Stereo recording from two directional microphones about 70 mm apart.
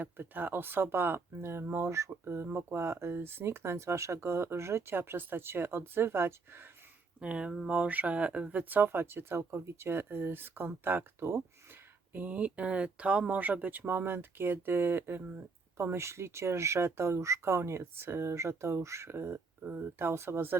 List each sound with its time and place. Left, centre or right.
0.0 s speech: right
7.2 s speech: centre; by 20.6 s right